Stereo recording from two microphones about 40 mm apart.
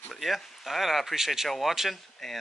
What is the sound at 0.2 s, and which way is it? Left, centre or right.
Speech, centre.